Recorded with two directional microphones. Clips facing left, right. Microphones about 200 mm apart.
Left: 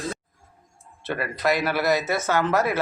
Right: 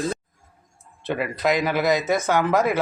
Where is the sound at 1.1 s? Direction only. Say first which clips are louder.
Right 2 dB; 15° right (ahead or behind).